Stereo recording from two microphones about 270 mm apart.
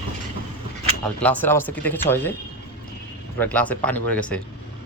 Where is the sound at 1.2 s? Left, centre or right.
Centre.